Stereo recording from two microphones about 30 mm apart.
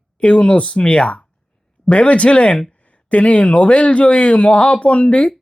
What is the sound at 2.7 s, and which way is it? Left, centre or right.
Speech, left.